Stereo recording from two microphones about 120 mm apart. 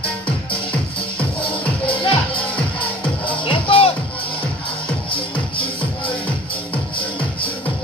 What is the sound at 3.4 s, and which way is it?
Music, 50° left (ahead or behind).